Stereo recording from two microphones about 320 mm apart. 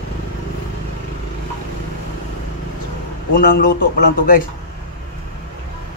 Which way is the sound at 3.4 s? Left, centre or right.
Left.